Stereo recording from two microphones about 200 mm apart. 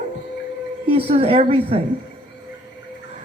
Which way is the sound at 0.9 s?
30° right (ahead or behind).